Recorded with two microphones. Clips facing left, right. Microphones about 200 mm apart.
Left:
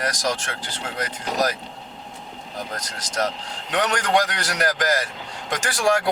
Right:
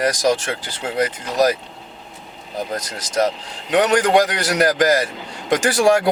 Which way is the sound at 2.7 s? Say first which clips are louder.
Right 6 dB; 5° right (ahead or behind).